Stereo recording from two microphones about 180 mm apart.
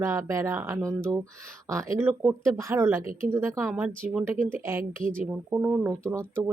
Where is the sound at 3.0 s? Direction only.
50° right (ahead or behind).